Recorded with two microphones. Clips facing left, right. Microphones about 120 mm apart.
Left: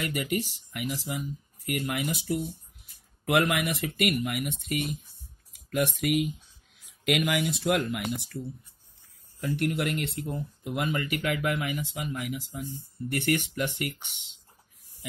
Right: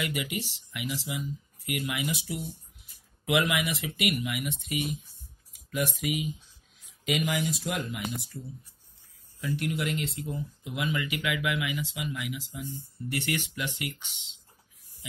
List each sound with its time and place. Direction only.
0.0 s speech: 45° left (ahead or behind)
9.4 s speech: 55° left (ahead or behind)